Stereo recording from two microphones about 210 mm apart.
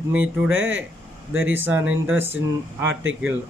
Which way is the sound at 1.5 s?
10° right (ahead or behind).